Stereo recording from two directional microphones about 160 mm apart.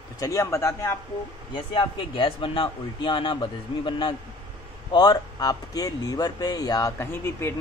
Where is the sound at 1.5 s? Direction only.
30° left (ahead or behind).